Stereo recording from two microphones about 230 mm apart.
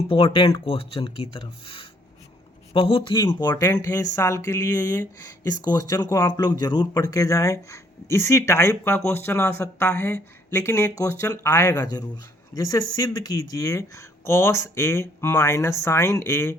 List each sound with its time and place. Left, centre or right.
0.1 s speech: left